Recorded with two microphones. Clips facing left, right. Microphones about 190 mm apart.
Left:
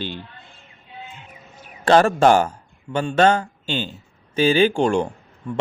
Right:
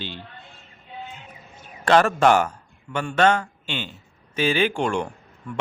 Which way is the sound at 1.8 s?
30° left (ahead or behind).